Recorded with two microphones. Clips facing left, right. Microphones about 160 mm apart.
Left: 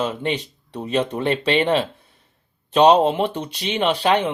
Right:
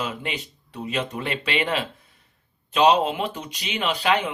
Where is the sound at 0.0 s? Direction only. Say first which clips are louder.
Left 7 dB; 30° left (ahead or behind).